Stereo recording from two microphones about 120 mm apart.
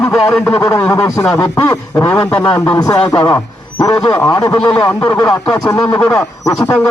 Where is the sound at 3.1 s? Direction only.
25° left (ahead or behind).